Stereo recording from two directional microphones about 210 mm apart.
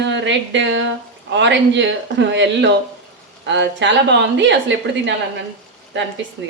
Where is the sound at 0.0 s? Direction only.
60° right (ahead or behind).